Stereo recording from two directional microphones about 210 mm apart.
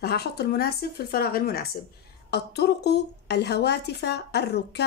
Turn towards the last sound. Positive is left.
turn(degrees=50)  # may be behind; listen again after turning